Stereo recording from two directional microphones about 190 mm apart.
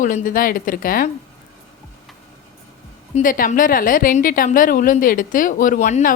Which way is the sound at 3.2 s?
45° left (ahead or behind).